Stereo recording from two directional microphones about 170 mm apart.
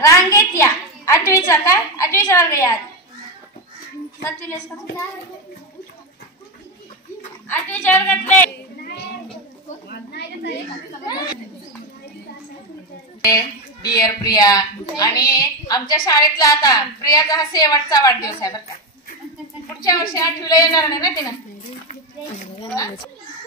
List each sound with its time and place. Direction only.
0.0 s a sound: 20° left (ahead or behind)
1.3 s a woman's voice: 15° left (ahead or behind)
4.2 s a woman's voice: 15° left (ahead or behind)
7.4 s a woman's voice: 10° left (ahead or behind)
8.5 s a sound: 70° left (ahead or behind)
9.8 s a woman's voice: 75° left (ahead or behind)
13.8 s a woman's voice: 20° left (ahead or behind)
20.2 s a woman's voice: 20° left (ahead or behind)
22.8 s a woman's voice: 20° left (ahead or behind)